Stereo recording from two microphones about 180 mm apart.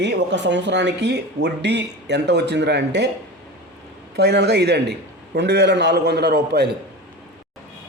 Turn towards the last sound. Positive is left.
turn(degrees=-65)  # may be behind; listen again after turning